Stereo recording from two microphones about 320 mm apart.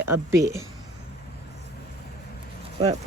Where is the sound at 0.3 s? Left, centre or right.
Centre.